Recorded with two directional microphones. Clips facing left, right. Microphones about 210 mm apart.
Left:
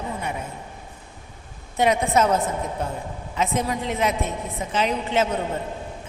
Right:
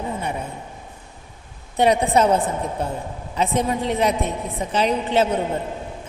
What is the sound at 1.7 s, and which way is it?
A woman's voice, 35° right (ahead or behind).